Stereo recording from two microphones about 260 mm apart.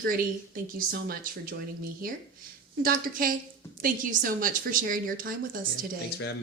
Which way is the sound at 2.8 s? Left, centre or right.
Right.